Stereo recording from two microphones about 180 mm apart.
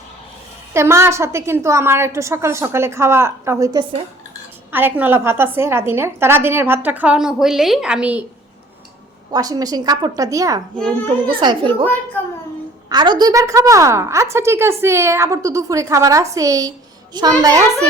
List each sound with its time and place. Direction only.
0.7 s a woman's voice: 15° right (ahead or behind)
9.3 s a woman's voice: 20° right (ahead or behind)
12.9 s a woman's voice: 25° right (ahead or behind)